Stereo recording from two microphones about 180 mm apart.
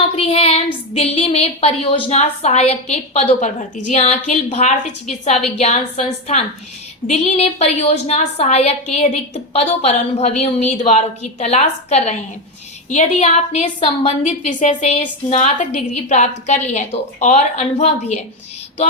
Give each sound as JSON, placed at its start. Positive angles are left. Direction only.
{"t": 0.2, "sound": "a woman's voice", "side_deg": 35}